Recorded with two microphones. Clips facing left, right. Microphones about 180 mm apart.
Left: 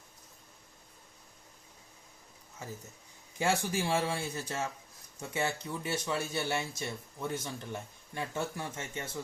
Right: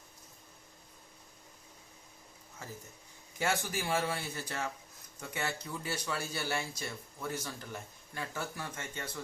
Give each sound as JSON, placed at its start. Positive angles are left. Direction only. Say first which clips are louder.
{"t": 3.3, "sound": "speech", "louder": "left 3 dB", "side_deg": 25}